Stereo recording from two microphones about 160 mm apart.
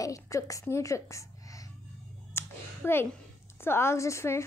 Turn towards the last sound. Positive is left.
turn(degrees=15)  # may be behind; listen again after turning